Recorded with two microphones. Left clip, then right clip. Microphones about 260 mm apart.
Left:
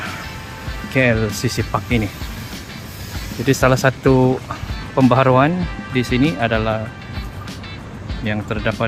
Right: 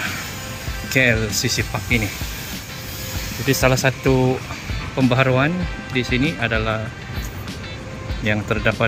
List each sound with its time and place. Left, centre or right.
0.9 s speech: centre
3.4 s speech: centre
8.2 s speech: centre